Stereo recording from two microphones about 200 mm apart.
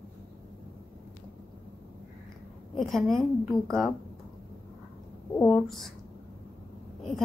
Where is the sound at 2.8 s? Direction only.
Centre (ahead or behind).